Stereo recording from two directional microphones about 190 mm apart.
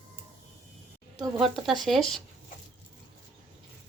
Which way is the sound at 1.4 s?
Centre (ahead or behind).